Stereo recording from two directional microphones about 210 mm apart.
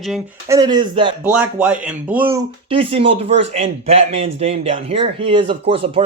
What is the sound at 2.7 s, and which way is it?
A man's voice, 25° right (ahead or behind).